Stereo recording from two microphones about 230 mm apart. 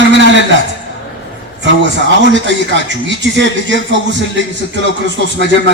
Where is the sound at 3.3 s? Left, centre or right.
Right.